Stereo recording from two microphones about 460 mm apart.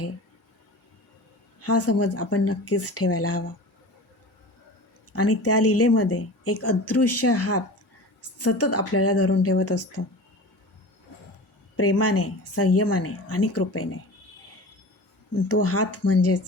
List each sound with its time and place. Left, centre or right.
1.6 s speech: left
5.1 s speech: left
11.8 s speech: left
15.6 s speech: left